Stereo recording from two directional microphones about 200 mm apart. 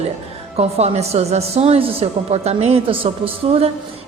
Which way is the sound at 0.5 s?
30° right (ahead or behind).